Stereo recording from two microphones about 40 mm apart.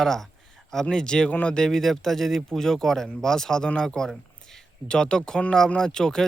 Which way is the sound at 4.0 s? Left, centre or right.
Centre.